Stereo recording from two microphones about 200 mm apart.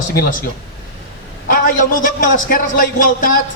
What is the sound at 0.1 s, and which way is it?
Speech, 50° left (ahead or behind).